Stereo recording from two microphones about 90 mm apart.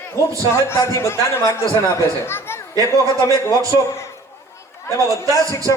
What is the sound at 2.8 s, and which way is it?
Speech, 40° left (ahead or behind).